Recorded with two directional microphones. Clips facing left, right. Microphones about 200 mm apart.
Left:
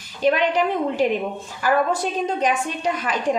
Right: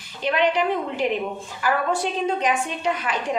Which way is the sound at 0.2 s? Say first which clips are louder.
Left 2 dB; 45° left (ahead or behind).